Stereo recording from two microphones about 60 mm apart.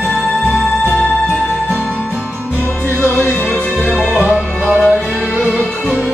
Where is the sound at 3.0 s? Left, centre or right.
Left.